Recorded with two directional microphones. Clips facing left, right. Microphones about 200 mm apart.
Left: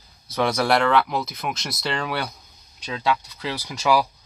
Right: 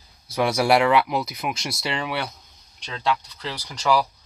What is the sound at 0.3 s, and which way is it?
Speech, 10° right (ahead or behind).